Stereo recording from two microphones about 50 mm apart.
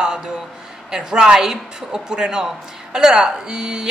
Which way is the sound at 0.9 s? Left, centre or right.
Centre.